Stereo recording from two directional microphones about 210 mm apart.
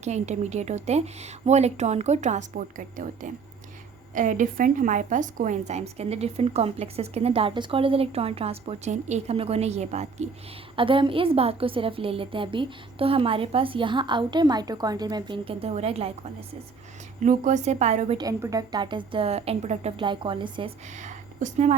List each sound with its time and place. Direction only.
0.0 s a woman's voice: 35° right (ahead or behind)
17.2 s a woman's voice: 35° right (ahead or behind)
18.2 s a woman's voice: 15° right (ahead or behind); by 21.8 s 35° right (ahead or behind)